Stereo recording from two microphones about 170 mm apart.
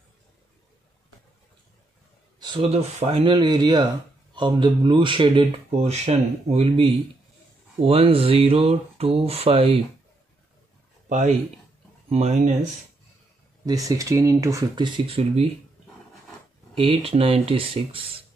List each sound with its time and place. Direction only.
2.4 s speech: 30° right (ahead or behind)
11.1 s speech: 45° right (ahead or behind)
13.7 s speech: 20° right (ahead or behind)
15.0 s speech: 35° right (ahead or behind)
16.7 s speech: 30° right (ahead or behind)